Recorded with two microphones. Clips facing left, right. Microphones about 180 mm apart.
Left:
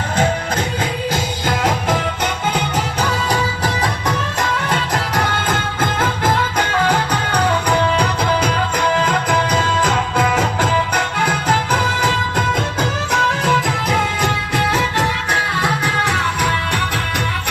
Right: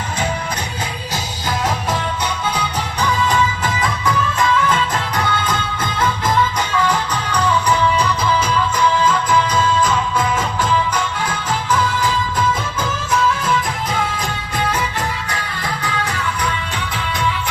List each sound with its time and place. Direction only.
3.3 s music: 35° left (ahead or behind); by 13.6 s 70° left (ahead or behind)
15.3 s music: 75° left (ahead or behind)